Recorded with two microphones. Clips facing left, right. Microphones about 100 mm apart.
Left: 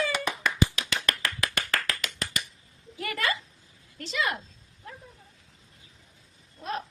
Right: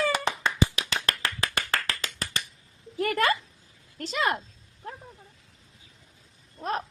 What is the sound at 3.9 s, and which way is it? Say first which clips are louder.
Speech: right 3 dB; 45° right (ahead or behind).